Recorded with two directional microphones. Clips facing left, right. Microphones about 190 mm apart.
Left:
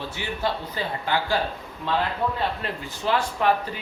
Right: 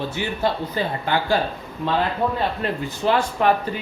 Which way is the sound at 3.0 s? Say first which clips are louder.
Right 3 dB; 60° right (ahead or behind).